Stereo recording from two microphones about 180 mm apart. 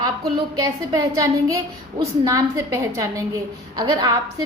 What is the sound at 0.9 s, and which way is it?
A woman's voice, 20° right (ahead or behind).